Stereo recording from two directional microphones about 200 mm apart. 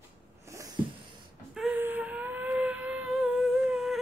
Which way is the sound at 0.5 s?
15° right (ahead or behind).